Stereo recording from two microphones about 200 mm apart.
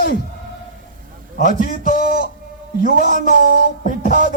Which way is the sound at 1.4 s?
45° left (ahead or behind).